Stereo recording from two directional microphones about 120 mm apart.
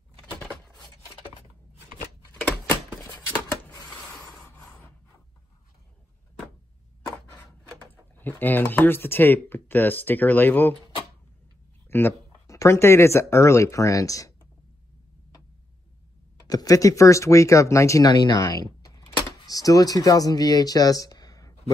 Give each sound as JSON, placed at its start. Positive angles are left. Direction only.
{"t": 0.2, "sound": "a sound", "side_deg": 5}
{"t": 4.6, "sound": "wood", "side_deg": 15}
{"t": 7.3, "sound": "speech", "side_deg": 15}
{"t": 11.9, "sound": "speech", "side_deg": 20}
{"t": 16.4, "sound": "speech", "side_deg": 30}